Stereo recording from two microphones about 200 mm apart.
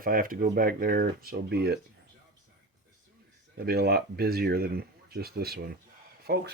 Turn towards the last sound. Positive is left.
turn(degrees=-55)  # may be behind; listen again after turning